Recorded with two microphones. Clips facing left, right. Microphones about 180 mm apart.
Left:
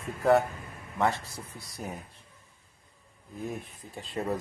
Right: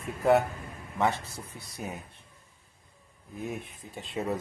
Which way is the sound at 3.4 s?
Centre (ahead or behind).